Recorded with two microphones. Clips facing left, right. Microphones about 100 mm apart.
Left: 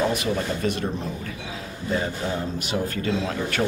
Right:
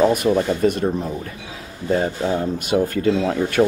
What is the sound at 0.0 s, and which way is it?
Speech, 50° right (ahead or behind).